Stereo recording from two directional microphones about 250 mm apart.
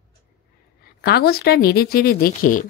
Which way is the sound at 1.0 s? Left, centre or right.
Left.